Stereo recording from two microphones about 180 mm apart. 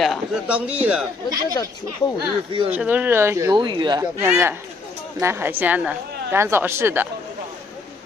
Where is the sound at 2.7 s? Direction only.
10° right (ahead or behind); by 4.0 s 25° right (ahead or behind).